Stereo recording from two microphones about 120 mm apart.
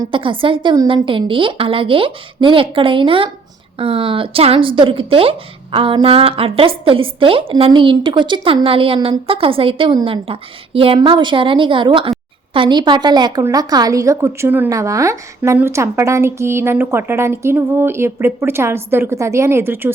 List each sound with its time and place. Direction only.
0.1 s a woman's voice: 45° right (ahead or behind)
1.0 s a woman's voice: 45° right (ahead or behind); by 19.9 s 20° right (ahead or behind)